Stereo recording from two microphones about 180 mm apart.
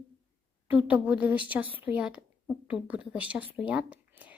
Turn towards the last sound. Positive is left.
turn(degrees=-5)  # may be behind; listen again after turning